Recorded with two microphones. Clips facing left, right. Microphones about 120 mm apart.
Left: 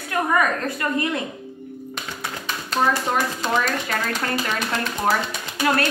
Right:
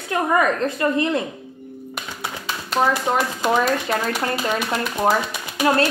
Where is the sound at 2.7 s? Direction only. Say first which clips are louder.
Right 2 dB; 15° right (ahead or behind).